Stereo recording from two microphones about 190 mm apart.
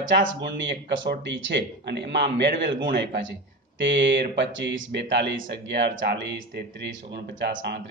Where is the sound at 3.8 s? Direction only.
70° right (ahead or behind).